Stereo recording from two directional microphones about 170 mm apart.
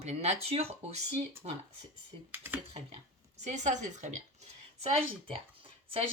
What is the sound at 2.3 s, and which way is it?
Speech, 10° right (ahead or behind).